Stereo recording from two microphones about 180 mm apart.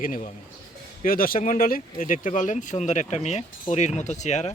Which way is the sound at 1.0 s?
55° left (ahead or behind).